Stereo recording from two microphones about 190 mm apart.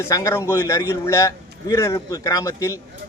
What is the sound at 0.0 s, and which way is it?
Speech, 15° left (ahead or behind).